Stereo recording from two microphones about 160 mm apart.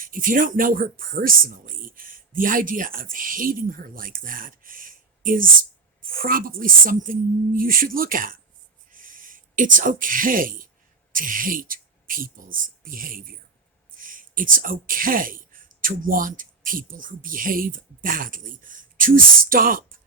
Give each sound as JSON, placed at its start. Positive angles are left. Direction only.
{"t": 0.0, "sound": "speech", "side_deg": -60}
{"t": 8.9, "sound": "a sound", "side_deg": -60}
{"t": 11.1, "sound": "speech", "side_deg": -60}